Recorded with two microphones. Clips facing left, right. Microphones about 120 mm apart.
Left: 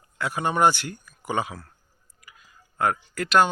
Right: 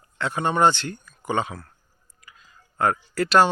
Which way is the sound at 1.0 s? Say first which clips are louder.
Right 2 dB; 10° left (ahead or behind).